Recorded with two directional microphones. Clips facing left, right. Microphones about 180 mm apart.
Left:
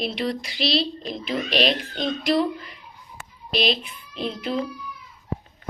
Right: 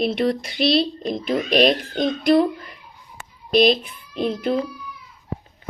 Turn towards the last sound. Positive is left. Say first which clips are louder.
# right 6 dB
turn(degrees=-50)  # may be behind; listen again after turning